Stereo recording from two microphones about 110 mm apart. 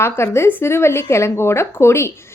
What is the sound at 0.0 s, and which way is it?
A woman's voice, 25° left (ahead or behind).